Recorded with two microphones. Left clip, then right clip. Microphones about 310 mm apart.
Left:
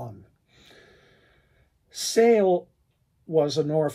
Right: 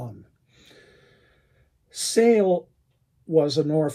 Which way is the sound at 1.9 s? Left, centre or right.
Left.